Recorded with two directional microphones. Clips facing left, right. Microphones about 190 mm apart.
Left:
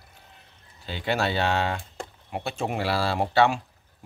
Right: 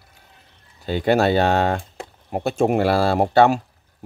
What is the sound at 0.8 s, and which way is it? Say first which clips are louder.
Speech: right 9 dB; 45° right (ahead or behind).